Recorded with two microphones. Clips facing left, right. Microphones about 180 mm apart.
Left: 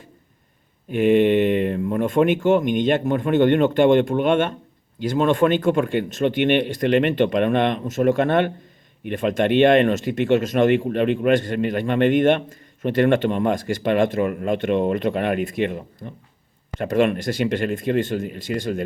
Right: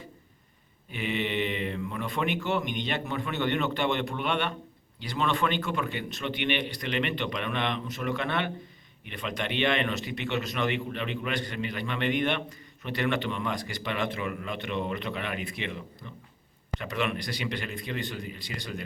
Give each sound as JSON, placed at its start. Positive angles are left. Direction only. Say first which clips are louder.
{"t": 0.9, "sound": "speech", "louder": "left 15 dB", "side_deg": 50}